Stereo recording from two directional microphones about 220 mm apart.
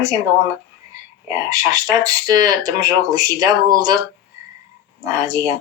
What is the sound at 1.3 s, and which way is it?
Speech, 15° right (ahead or behind).